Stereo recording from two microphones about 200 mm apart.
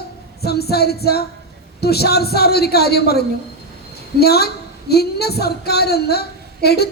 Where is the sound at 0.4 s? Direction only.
50° left (ahead or behind).